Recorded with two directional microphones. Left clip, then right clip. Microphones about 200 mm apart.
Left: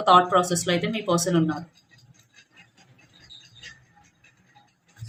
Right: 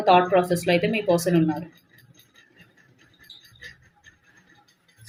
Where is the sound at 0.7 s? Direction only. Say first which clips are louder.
Right 4 dB; 20° left (ahead or behind).